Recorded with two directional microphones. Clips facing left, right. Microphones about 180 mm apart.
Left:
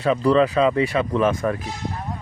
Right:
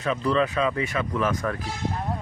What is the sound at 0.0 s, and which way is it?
Speech, 35° left (ahead or behind).